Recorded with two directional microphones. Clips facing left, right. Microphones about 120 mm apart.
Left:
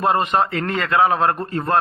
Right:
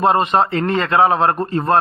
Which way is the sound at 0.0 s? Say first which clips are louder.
Right 3 dB; 25° right (ahead or behind).